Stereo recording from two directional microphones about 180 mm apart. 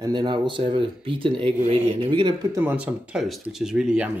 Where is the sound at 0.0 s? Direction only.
25° right (ahead or behind).